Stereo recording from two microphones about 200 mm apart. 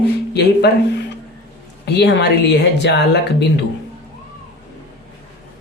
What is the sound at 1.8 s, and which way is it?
Speech, 55° left (ahead or behind).